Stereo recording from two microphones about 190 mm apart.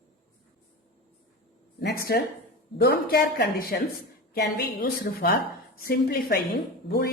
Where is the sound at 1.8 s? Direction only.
55° left (ahead or behind).